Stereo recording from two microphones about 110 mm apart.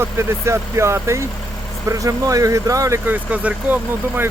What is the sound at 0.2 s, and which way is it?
Speech, 25° right (ahead or behind).